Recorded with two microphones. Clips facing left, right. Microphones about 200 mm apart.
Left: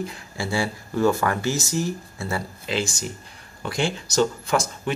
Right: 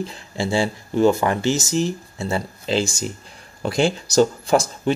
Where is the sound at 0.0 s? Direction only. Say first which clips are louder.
Right 4 dB; 30° right (ahead or behind).